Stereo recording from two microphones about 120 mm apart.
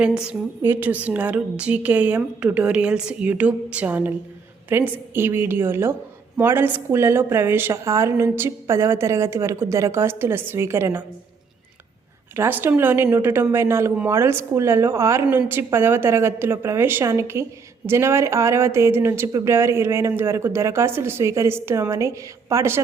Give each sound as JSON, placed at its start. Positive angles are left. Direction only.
{"t": 0.0, "sound": "a woman's voice", "side_deg": -10}
{"t": 12.4, "sound": "a woman's voice", "side_deg": -15}